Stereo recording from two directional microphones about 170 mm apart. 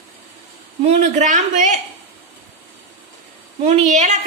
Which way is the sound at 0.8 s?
40° right (ahead or behind).